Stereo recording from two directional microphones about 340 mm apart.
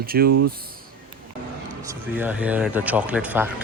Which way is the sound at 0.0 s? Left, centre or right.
Right.